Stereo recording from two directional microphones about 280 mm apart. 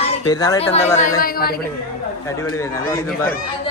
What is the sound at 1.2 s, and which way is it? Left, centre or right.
Speech, left.